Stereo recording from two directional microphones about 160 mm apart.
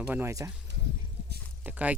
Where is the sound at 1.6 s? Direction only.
10° right (ahead or behind).